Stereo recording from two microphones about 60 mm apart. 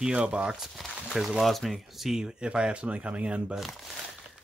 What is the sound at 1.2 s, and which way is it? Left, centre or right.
Speech, centre.